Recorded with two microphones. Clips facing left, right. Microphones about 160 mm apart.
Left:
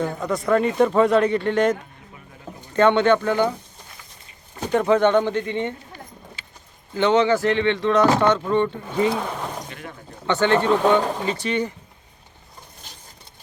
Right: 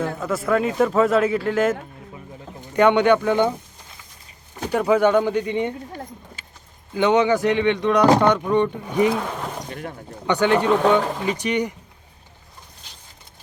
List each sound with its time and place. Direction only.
0.0 s a man's voice: 5° right (ahead or behind)
2.7 s speech: 15° right (ahead or behind)
4.7 s speech: 10° right (ahead or behind)
6.4 s keys jangling: 45° right (ahead or behind)
6.9 s speech: 15° right (ahead or behind)
9.6 s a sound: 45° right (ahead or behind)
10.2 s speech: 10° right (ahead or behind)